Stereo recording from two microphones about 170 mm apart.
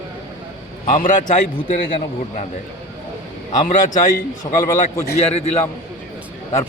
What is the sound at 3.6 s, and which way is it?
Speech, 50° left (ahead or behind).